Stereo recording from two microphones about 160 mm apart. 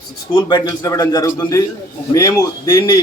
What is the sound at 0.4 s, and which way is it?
A man's voice, 25° left (ahead or behind).